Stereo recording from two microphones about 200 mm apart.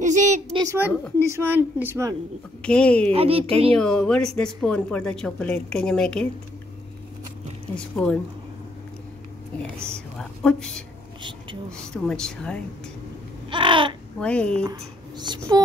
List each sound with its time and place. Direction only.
0.0 s a sound: 40° right (ahead or behind)
0.6 s a woman's voice: 10° right (ahead or behind)
2.6 s a woman's voice: 5° left (ahead or behind)
3.1 s speech: 30° right (ahead or behind)
3.7 s a woman's voice: 5° left (ahead or behind)
7.7 s a woman's voice: 5° left (ahead or behind)
9.9 s a woman's voice: 5° left (ahead or behind)
13.5 s babbling: 25° right (ahead or behind)
14.2 s a woman's voice: 5° left (ahead or behind)
14.6 s speech: 20° right (ahead or behind)